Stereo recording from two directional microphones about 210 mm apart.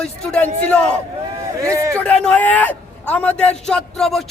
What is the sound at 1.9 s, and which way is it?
A man's voice, 5° left (ahead or behind).